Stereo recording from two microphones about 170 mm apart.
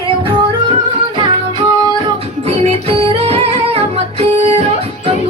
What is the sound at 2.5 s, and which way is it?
Music, 35° right (ahead or behind).